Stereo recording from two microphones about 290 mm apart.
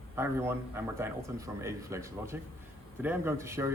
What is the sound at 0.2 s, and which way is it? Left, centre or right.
A man's voice, centre.